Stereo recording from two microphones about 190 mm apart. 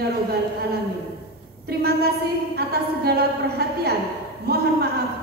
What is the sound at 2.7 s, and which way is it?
A woman's voice, 55° right (ahead or behind).